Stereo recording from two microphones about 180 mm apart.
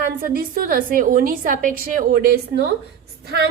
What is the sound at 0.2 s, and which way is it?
A woman's voice, 50° right (ahead or behind).